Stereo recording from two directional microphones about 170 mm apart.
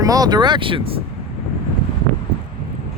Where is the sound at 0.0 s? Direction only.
20° right (ahead or behind).